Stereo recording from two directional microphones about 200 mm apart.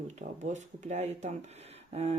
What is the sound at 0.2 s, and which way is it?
Speech, 35° right (ahead or behind).